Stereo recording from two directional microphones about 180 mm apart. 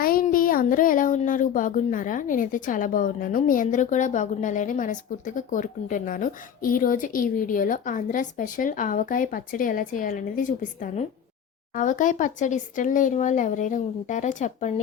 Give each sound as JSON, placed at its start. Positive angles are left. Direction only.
{"t": 0.0, "sound": "speech", "side_deg": 55}